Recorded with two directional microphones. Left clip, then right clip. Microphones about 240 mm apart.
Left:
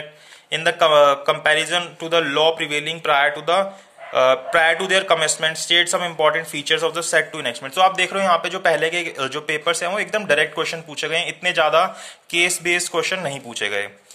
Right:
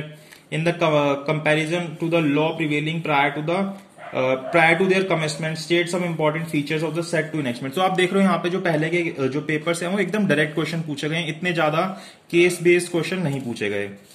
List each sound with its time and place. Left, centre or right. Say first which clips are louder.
0.7 s speech: left 6 dB; left